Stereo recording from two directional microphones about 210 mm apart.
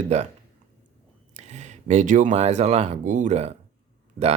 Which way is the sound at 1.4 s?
30° right (ahead or behind).